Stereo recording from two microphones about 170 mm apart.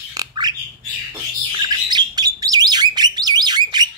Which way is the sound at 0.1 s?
25° right (ahead or behind).